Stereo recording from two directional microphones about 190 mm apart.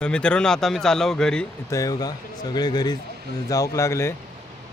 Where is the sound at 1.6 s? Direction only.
15° left (ahead or behind).